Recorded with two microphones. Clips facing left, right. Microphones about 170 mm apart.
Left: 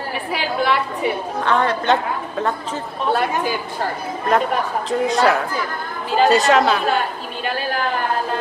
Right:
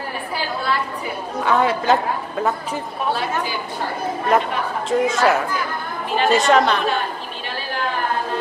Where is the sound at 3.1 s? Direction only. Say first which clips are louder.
Left 4 dB; 55° left (ahead or behind).